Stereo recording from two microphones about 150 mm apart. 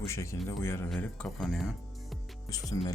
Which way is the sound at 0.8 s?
5° left (ahead or behind).